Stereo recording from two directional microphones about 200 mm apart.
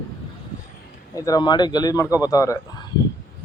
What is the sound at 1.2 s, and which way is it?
A man's voice, 20° left (ahead or behind).